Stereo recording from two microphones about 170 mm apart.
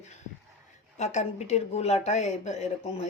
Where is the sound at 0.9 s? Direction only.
40° left (ahead or behind).